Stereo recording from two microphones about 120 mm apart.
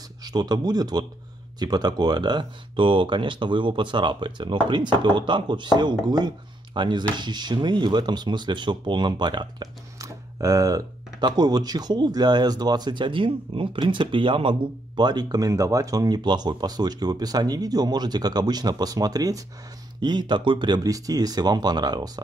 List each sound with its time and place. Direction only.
0.2 s speech: 35° right (ahead or behind)